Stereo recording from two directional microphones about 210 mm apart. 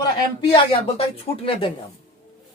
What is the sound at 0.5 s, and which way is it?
Speech, 25° left (ahead or behind).